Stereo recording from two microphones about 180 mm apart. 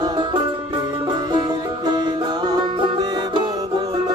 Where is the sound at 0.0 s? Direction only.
25° right (ahead or behind).